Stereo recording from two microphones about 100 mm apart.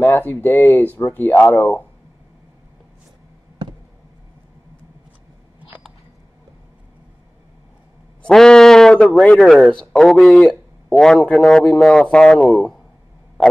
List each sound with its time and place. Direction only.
0.0 s speech: 20° left (ahead or behind)
8.3 s a man's voice: 5° left (ahead or behind)